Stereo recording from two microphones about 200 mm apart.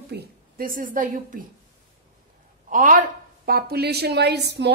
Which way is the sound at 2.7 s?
40° right (ahead or behind).